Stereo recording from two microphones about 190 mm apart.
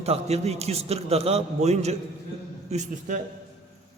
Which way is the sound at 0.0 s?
35° right (ahead or behind).